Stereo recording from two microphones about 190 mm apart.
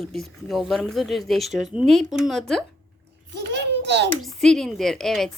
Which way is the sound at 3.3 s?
65° right (ahead or behind).